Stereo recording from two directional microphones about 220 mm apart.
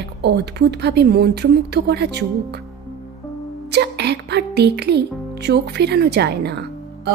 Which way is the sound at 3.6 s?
50° right (ahead or behind).